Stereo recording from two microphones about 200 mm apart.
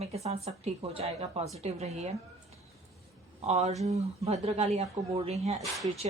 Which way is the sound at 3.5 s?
35° right (ahead or behind).